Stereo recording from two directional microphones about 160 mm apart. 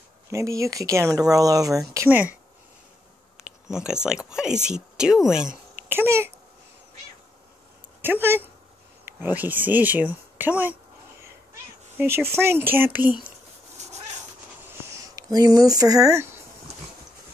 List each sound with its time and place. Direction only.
0.3 s speech: 20° right (ahead or behind)
2.0 s speech: 10° right (ahead or behind)
3.4 s speech: 5° right (ahead or behind)
8.0 s speech: 15° right (ahead or behind)
12.0 s speech: 15° right (ahead or behind)
14.7 s a sound: 20° right (ahead or behind)